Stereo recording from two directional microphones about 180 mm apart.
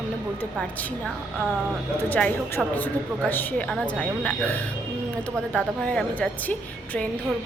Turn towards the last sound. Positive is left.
turn(degrees=10)  # may be behind; listen again after turning